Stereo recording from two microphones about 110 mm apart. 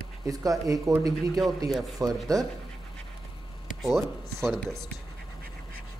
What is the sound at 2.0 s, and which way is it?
Speech, 35° right (ahead or behind).